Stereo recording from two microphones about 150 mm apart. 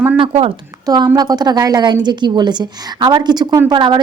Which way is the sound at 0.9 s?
30° right (ahead or behind).